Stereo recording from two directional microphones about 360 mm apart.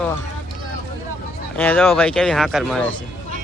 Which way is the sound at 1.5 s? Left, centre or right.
Centre.